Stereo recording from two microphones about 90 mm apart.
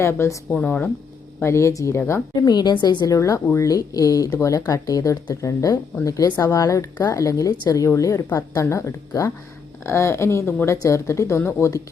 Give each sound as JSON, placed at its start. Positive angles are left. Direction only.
{"t": 0.0, "sound": "speech", "side_deg": 30}
{"t": 0.5, "sound": "speech", "side_deg": 15}
{"t": 1.4, "sound": "a woman's voice", "side_deg": 30}
{"t": 2.3, "sound": "a woman's voice", "side_deg": 50}
{"t": 3.1, "sound": "speech", "side_deg": 35}